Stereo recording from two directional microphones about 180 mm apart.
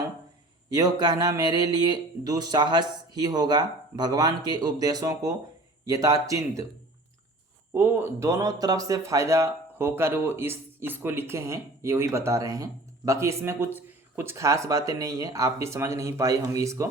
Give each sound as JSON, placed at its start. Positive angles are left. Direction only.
{"t": 0.7, "sound": "speech", "side_deg": -20}
{"t": 7.7, "sound": "speech", "side_deg": -10}